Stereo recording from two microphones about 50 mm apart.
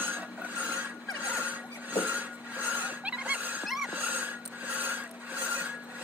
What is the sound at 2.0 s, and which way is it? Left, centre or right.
Music, right.